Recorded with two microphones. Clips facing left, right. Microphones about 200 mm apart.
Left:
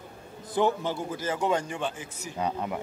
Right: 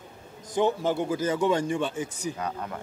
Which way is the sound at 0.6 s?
20° right (ahead or behind).